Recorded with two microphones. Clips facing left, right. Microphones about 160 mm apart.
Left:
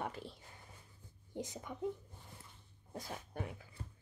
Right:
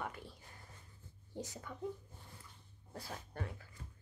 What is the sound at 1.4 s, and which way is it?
Speech, 20° left (ahead or behind).